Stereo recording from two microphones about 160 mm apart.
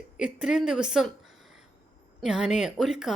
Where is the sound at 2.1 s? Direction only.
5° right (ahead or behind).